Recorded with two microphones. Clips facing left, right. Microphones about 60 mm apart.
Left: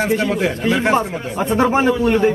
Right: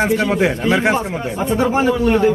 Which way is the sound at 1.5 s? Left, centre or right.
Left.